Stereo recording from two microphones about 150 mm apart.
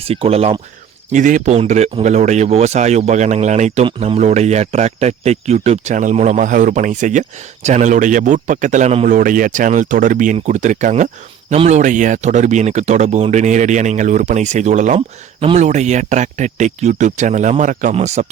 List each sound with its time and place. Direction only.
0.0 s speech: 40° right (ahead or behind)
1.1 s speech: 60° right (ahead or behind)
1.5 s speech: 50° right (ahead or behind)
3.8 s speech: 35° right (ahead or behind)
4.2 s speech: 50° right (ahead or behind)
9.0 s speech: 65° right (ahead or behind); by 18.3 s 50° right (ahead or behind)